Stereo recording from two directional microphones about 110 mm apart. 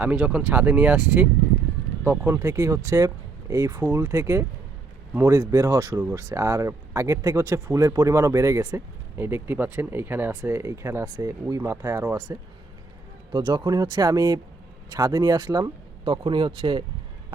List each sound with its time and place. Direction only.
0.0 s speech: 10° right (ahead or behind); by 12.4 s 30° right (ahead or behind)
13.3 s speech: 45° right (ahead or behind)
16.0 s speech: 50° right (ahead or behind)